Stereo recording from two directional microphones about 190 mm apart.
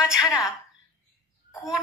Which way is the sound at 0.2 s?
20° left (ahead or behind).